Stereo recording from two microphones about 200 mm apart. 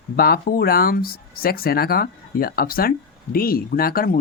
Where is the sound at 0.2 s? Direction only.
45° left (ahead or behind).